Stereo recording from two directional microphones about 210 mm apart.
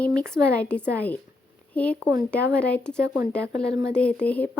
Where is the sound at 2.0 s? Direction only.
15° right (ahead or behind).